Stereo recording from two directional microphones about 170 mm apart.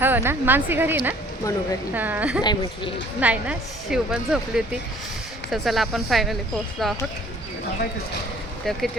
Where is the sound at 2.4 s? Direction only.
25° left (ahead or behind).